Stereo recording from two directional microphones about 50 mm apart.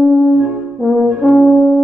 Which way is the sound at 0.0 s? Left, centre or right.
Centre.